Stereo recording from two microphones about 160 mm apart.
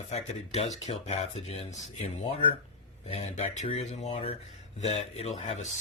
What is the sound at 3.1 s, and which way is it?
Speech, 40° left (ahead or behind).